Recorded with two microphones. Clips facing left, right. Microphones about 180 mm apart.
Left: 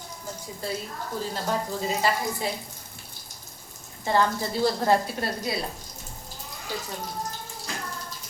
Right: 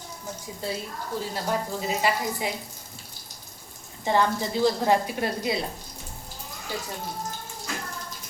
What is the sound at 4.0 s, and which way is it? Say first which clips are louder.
Speech: even; 15° right (ahead or behind).